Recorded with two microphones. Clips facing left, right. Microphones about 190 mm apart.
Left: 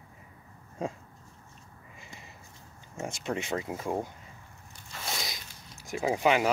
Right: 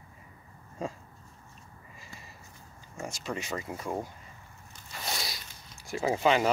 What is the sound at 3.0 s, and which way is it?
Speech, 25° left (ahead or behind).